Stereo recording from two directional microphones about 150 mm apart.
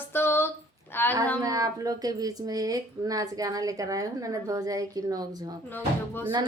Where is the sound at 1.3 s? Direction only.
25° right (ahead or behind).